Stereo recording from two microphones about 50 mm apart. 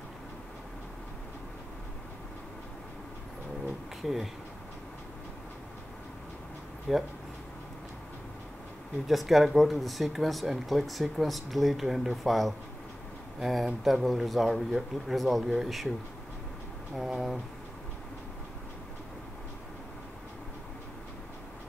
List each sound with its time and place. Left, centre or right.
4.0 s speech: centre
6.9 s speech: centre
9.0 s speech: centre
16.9 s speech: centre